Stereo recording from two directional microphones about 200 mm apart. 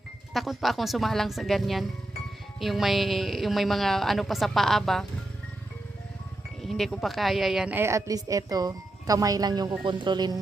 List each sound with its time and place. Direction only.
0.3 s speech: centre (ahead or behind)
6.6 s a woman's voice: centre (ahead or behind); by 10.4 s 20° right (ahead or behind)